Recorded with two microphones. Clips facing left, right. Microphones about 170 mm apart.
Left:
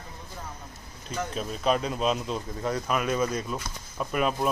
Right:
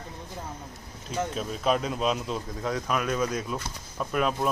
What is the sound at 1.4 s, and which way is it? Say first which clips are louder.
A man's voice: left 1 dB; centre (ahead or behind).